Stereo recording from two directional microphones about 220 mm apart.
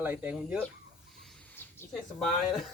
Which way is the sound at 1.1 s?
Centre (ahead or behind).